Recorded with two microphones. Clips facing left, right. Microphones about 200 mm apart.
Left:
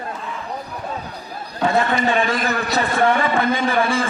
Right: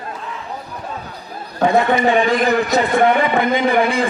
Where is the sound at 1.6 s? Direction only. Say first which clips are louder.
Right 4 dB; 15° right (ahead or behind).